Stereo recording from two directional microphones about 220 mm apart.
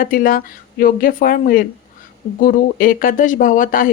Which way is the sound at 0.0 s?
40° left (ahead or behind).